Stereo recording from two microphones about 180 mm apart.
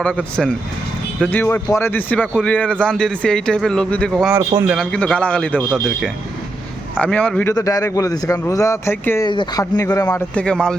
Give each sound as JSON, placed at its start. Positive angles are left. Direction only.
{"t": 0.0, "sound": "a man's voice", "side_deg": 5}
{"t": 4.4, "sound": "a man's voice", "side_deg": -15}
{"t": 4.7, "sound": "a man's voice", "side_deg": 5}
{"t": 7.5, "sound": "a man's voice", "side_deg": 20}